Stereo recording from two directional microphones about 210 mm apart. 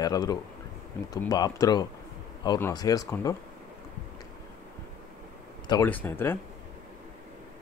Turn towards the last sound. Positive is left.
turn(degrees=10)  # may be behind; listen again after turning